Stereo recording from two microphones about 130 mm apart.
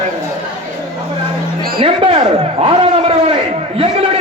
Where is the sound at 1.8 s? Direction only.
40° right (ahead or behind).